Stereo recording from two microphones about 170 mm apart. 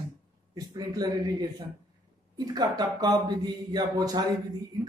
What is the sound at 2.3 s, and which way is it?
Speech, 25° right (ahead or behind).